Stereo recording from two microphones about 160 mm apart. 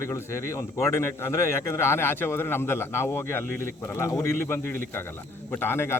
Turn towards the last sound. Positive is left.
turn(degrees=15)  # may be behind; listen again after turning